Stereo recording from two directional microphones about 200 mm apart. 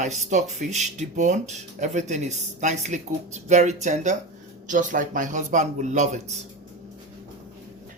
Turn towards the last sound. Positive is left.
turn(degrees=-35)  # may be behind; listen again after turning